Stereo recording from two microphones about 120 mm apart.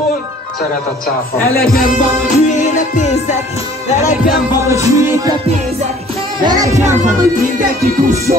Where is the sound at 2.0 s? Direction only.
90° left.